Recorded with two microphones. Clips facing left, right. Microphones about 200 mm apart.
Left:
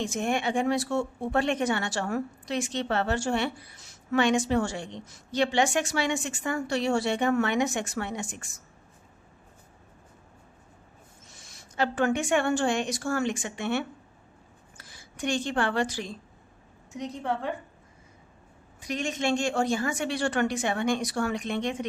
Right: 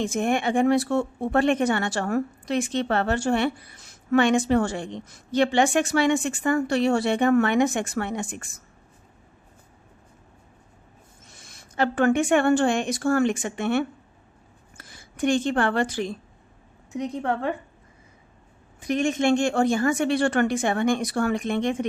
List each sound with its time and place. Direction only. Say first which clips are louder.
0.0 s speech: right 4 dB; 55° right (ahead or behind)
11.3 s speech: right 2 dB; 60° right (ahead or behind)
18.8 s speech: right 7 dB; 50° right (ahead or behind)